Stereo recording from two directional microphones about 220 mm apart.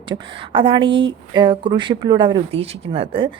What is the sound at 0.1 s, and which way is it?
A woman's voice, 20° right (ahead or behind).